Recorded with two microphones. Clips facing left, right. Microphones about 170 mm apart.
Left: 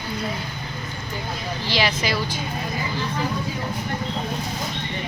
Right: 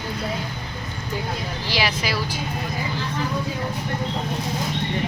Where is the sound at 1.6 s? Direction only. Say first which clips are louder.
Left 2 dB; 10° right (ahead or behind).